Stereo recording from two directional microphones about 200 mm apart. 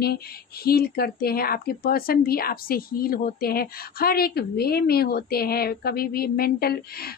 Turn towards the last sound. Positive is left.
turn(degrees=50)  # may be behind; listen again after turning